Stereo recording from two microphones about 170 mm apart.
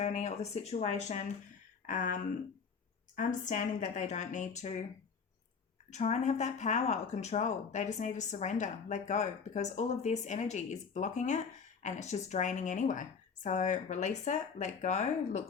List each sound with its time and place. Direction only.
0.0 s speech: 40° left (ahead or behind)
3.2 s speech: 50° left (ahead or behind)
5.9 s speech: 40° left (ahead or behind)